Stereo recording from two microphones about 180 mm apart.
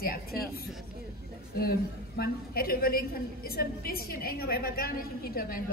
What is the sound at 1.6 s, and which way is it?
A woman's voice, 60° left (ahead or behind).